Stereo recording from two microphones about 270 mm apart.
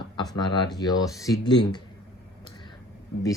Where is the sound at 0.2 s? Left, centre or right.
Centre.